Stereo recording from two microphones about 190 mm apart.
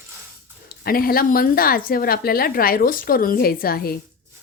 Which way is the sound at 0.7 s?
50° left (ahead or behind).